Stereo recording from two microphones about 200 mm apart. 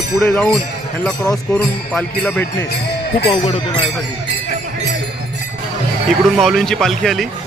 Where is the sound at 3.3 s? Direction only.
25° left (ahead or behind).